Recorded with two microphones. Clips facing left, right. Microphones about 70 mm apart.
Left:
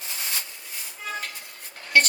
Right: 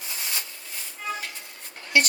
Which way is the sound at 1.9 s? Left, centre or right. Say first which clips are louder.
Left 2 dB; left.